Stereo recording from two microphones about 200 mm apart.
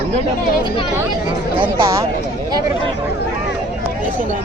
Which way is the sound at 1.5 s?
10° right (ahead or behind).